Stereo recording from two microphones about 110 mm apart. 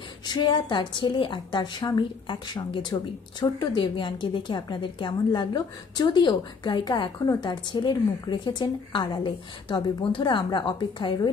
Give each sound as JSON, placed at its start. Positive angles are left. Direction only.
{"t": 0.2, "sound": "a woman's voice", "side_deg": 45}